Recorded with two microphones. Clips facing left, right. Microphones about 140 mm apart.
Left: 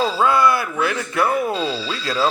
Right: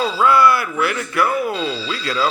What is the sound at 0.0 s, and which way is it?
Speech, 20° left (ahead or behind).